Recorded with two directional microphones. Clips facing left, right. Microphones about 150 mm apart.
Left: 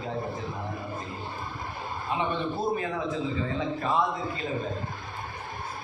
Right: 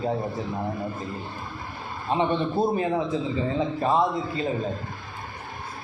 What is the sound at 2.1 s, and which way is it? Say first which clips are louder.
A man's voice: right 6 dB; 30° right (ahead or behind).